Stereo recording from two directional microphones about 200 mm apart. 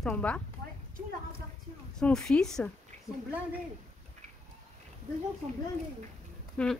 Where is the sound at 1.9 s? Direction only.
5° left (ahead or behind).